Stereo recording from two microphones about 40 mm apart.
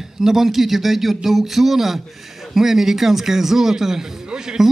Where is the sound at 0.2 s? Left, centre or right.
Centre.